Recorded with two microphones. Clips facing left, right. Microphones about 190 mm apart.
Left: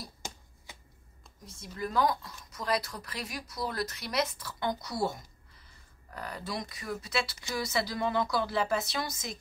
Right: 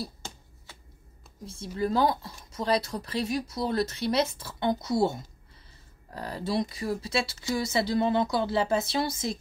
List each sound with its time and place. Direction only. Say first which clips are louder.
1.4 s speech: right 8 dB; 30° right (ahead or behind)